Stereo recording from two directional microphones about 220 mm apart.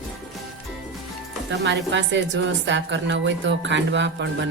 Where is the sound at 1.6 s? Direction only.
55° right (ahead or behind).